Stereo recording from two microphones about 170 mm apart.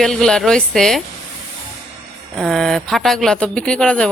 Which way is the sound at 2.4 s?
Centre (ahead or behind).